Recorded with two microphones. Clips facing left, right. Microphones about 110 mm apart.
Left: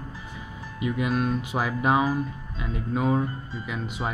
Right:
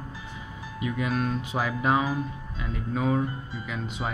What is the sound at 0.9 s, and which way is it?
Speech, 5° left (ahead or behind).